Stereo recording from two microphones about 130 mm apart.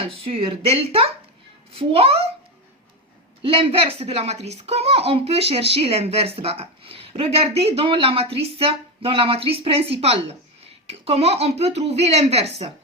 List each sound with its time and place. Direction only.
0.0 s speech: 45° right (ahead or behind)
3.4 s speech: 45° right (ahead or behind)